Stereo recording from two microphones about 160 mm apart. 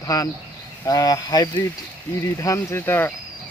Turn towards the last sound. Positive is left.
turn(degrees=15)  # may be behind; listen again after turning